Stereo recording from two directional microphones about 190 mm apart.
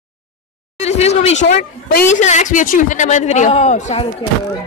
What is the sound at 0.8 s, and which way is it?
Speech, 35° left (ahead or behind).